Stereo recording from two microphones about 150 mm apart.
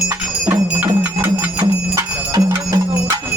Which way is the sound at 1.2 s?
15° right (ahead or behind).